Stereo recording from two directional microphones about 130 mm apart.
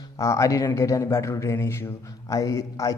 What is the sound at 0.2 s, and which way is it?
Speech, 25° left (ahead or behind).